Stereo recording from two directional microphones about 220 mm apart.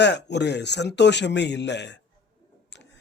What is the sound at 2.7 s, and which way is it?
Tick-tock, 50° left (ahead or behind).